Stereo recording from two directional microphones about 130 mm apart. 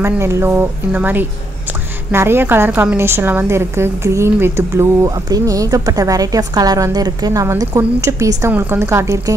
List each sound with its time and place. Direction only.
0.0 s a woman's voice: 20° right (ahead or behind)